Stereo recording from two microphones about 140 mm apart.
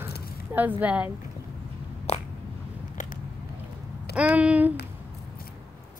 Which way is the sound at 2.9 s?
60° left (ahead or behind).